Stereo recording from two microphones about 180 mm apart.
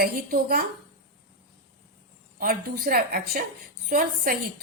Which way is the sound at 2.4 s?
55° right (ahead or behind).